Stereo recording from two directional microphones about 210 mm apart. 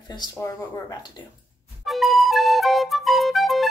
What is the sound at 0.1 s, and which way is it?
Speech, 20° left (ahead or behind).